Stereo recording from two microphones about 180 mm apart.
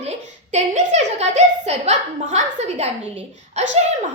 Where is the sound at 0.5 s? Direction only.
40° right (ahead or behind).